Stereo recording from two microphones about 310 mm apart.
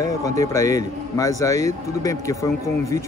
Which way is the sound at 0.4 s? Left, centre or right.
Centre.